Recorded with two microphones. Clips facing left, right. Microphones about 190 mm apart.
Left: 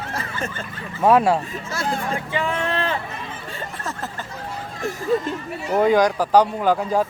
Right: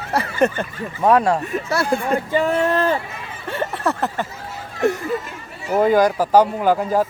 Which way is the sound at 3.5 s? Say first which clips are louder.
Right 12 dB; 65° right (ahead or behind).